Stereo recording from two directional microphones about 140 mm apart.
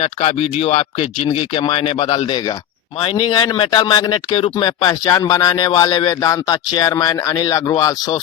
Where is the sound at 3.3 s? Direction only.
30° left (ahead or behind).